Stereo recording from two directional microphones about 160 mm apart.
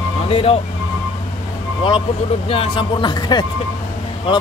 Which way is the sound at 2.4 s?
35° left (ahead or behind).